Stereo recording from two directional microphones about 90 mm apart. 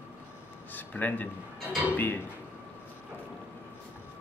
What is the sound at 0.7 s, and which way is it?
Speech, 20° left (ahead or behind).